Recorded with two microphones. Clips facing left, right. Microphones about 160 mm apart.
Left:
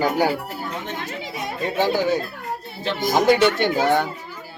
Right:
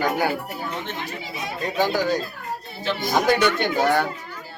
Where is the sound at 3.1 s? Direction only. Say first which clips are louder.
Left 3 dB; 25° left (ahead or behind).